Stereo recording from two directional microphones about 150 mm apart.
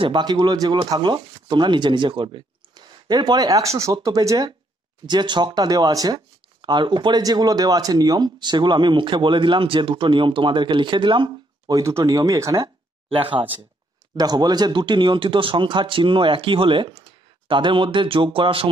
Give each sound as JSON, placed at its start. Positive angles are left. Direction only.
{"t": 0.0, "sound": "speech", "side_deg": -30}
{"t": 13.1, "sound": "speech", "side_deg": -35}